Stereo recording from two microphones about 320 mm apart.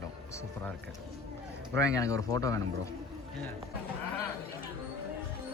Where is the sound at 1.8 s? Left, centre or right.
Centre.